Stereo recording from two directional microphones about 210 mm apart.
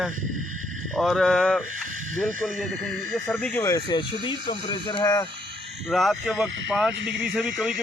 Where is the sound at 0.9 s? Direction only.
Centre (ahead or behind).